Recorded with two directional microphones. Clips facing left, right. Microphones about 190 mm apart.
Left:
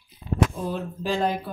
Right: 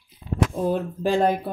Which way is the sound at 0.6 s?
50° right (ahead or behind).